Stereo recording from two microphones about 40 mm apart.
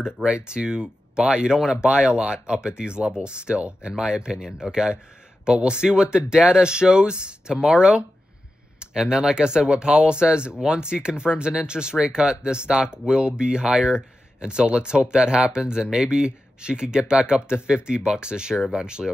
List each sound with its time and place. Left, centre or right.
0.0 s speech: centre